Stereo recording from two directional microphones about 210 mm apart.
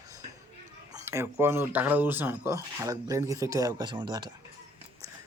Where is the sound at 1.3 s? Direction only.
10° right (ahead or behind).